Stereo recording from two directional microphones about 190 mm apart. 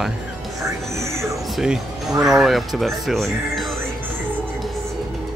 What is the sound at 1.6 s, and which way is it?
Speech, centre (ahead or behind).